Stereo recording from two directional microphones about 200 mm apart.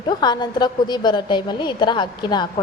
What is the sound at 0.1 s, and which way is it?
A woman's voice, 20° left (ahead or behind).